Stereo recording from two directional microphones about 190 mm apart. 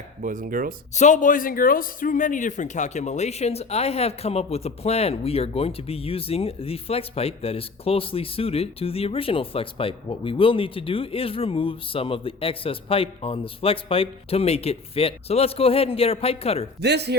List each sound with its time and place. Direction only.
0.2 s speech: 45° right (ahead or behind)
0.9 s a man's voice: 40° left (ahead or behind)
16.8 s speech: 60° right (ahead or behind)